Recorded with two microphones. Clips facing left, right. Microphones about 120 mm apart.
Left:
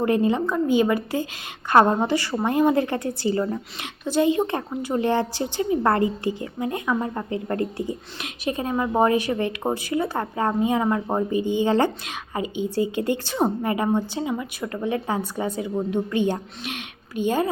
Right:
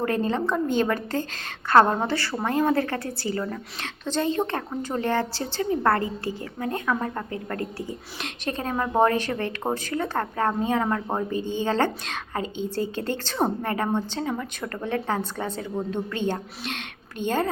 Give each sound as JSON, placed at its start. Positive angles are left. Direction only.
{"t": 0.0, "sound": "a woman's voice", "side_deg": 15}